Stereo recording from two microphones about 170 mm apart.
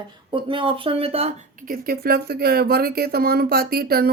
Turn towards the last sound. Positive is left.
turn(degrees=-65)  # may be behind; listen again after turning